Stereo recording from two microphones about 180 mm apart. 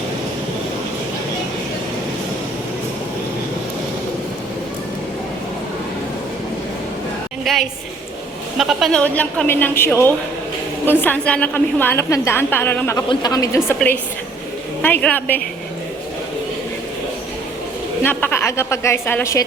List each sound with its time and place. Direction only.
7.5 s a sound: centre (ahead or behind)
8.5 s a woman's voice: centre (ahead or behind); by 13.7 s 15° left (ahead or behind)
14.8 s a woman's voice: 10° left (ahead or behind)
18.0 s a woman's voice: 10° left (ahead or behind)